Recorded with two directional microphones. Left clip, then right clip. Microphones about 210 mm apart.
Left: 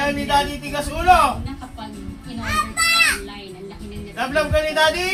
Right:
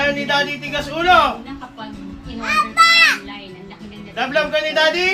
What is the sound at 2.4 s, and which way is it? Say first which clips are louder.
Children playing: right 7 dB; 5° left (ahead or behind).